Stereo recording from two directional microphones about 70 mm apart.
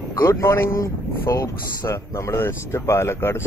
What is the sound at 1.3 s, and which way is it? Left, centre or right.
Speech, left.